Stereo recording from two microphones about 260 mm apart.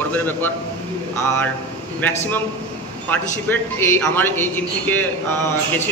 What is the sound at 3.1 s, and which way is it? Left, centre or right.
A man's voice, centre.